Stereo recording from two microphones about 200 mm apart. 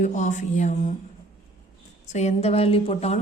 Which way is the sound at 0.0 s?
40° left (ahead or behind).